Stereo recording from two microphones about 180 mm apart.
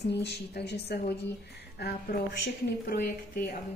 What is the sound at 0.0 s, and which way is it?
Speech, 70° left (ahead or behind).